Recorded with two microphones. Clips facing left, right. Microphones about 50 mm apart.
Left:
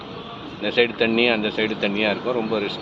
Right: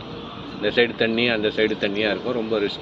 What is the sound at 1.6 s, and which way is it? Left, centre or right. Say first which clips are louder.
Speech: even; centre.